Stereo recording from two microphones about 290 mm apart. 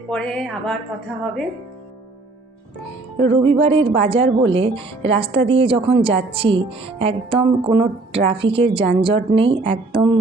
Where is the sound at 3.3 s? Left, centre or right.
Centre.